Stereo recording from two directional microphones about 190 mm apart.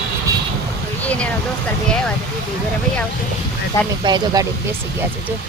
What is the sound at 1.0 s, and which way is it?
Speech, 5° left (ahead or behind).